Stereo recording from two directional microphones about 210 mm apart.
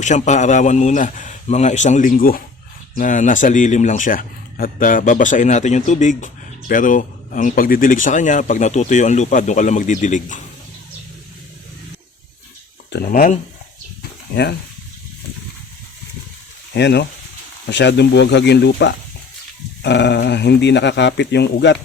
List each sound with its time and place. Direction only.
0.0 s speech: 35° left (ahead or behind)
12.9 s speech: 45° left (ahead or behind)
16.7 s speech: 55° left (ahead or behind)